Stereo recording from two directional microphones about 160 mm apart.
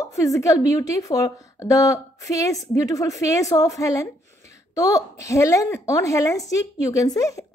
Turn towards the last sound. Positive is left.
turn(degrees=20)  # may be behind; listen again after turning